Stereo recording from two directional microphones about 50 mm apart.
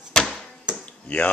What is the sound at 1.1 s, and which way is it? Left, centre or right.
Speech, left.